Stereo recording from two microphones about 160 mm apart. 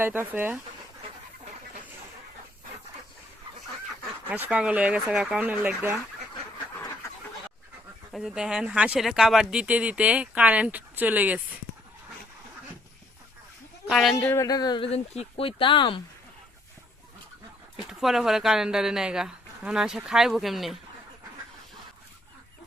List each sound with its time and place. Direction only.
0.0 s speech: 10° right (ahead or behind)
4.4 s speech: 10° right (ahead or behind)
8.1 s speech: 5° right (ahead or behind)
13.8 s a man's voice: centre (ahead or behind)
14.3 s a man's voice: 20° left (ahead or behind)
14.8 s speech: 40° left (ahead or behind)
18.0 s speech: centre (ahead or behind)